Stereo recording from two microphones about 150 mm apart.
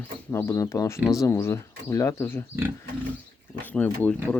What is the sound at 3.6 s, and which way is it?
Speech, 10° left (ahead or behind).